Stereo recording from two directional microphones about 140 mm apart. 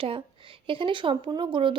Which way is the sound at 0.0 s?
40° right (ahead or behind).